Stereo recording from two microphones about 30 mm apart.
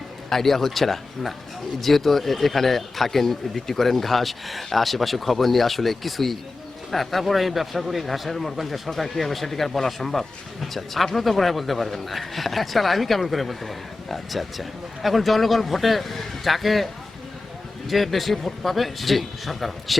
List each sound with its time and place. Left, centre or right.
0.3 s speech: centre